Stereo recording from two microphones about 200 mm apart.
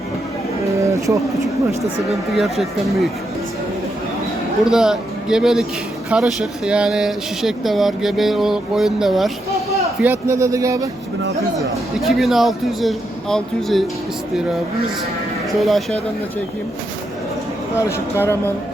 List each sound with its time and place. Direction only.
0.8 s a sound: 15° right (ahead or behind)
1.8 s speech: centre (ahead or behind)
4.6 s speech: 5° right (ahead or behind)
10.0 s speech: 10° right (ahead or behind)
11.9 s speech: centre (ahead or behind)
15.6 s speech: centre (ahead or behind)
17.7 s speech: 15° left (ahead or behind)